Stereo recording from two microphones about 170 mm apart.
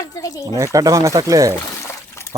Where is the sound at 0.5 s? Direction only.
20° right (ahead or behind).